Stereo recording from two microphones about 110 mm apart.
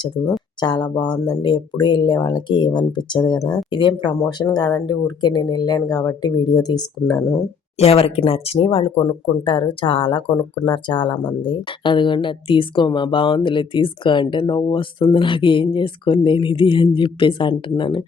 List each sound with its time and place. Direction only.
0.6 s speech: 45° left (ahead or behind)
7.8 s speech: 65° left (ahead or behind); by 18.0 s 45° left (ahead or behind)